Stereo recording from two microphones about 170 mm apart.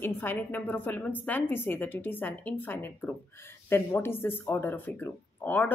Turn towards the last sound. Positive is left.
turn(degrees=10)  # may be behind; listen again after turning